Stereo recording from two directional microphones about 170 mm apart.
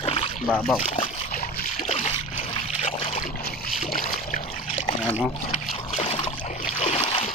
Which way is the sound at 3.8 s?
45° left (ahead or behind).